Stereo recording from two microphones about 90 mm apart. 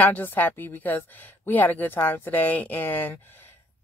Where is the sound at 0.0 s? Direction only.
20° left (ahead or behind).